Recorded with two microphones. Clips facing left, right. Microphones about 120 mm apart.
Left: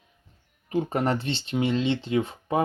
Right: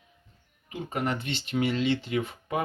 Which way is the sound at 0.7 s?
35° left (ahead or behind).